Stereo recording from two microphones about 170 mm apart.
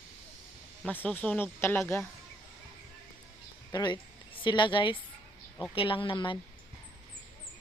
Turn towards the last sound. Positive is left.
turn(degrees=30)  # may be behind; listen again after turning